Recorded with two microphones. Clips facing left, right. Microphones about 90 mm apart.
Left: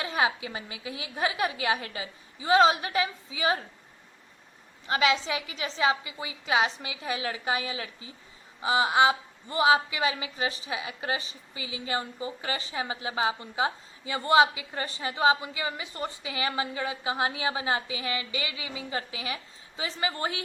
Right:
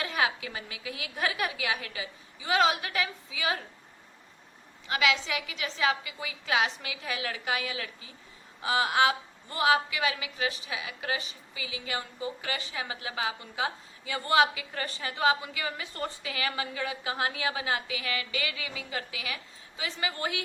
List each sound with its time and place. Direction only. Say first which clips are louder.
0.0 s a woman's voice: left 2 dB; 25° left (ahead or behind)
4.9 s a woman's voice: left 2 dB; 30° left (ahead or behind)